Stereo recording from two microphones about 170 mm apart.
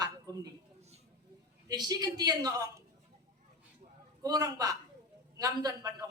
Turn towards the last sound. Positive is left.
turn(degrees=-20)  # may be behind; listen again after turning